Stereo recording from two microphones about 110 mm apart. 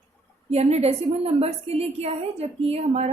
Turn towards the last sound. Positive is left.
turn(degrees=-70)  # may be behind; listen again after turning